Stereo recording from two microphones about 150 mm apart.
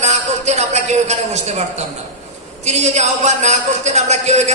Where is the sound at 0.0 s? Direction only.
50° right (ahead or behind).